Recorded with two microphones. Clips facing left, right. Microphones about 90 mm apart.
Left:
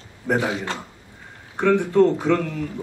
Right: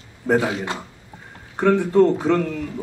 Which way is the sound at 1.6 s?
40° right (ahead or behind).